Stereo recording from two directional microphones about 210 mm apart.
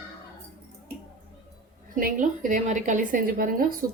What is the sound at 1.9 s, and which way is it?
A woman's voice, 40° right (ahead or behind).